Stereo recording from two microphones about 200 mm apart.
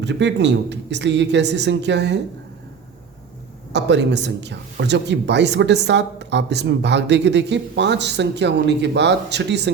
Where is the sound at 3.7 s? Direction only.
60° right (ahead or behind).